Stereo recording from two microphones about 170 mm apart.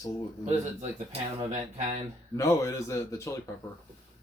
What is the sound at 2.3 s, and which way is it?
Speech, 20° left (ahead or behind).